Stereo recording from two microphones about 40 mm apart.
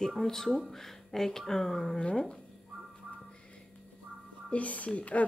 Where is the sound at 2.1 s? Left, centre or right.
Centre.